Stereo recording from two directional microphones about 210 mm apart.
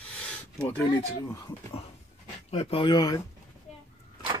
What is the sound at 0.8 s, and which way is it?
Speech, 20° left (ahead or behind).